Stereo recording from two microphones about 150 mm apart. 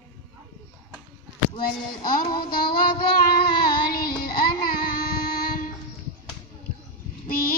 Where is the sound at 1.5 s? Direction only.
75° left (ahead or behind).